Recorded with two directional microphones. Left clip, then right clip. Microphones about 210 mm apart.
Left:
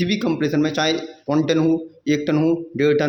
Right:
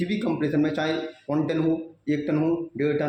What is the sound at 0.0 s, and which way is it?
Speech, 35° left (ahead or behind).